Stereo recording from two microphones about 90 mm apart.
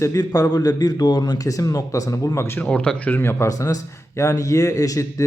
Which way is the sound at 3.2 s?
25° left (ahead or behind).